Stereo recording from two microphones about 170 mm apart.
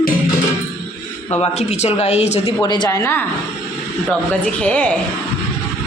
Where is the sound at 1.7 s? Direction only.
40° left (ahead or behind).